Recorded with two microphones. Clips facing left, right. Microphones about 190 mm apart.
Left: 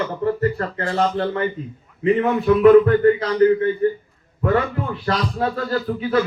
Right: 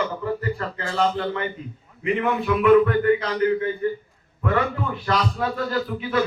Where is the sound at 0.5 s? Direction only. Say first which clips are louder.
Left 4 dB; 40° left (ahead or behind).